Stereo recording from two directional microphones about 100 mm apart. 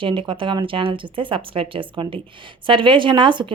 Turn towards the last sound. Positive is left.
turn(degrees=-55)  # may be behind; listen again after turning